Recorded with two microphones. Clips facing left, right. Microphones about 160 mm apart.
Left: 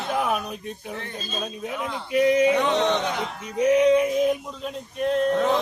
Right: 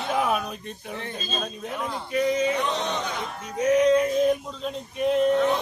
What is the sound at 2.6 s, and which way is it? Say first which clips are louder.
Speech: left 6 dB; 80° left.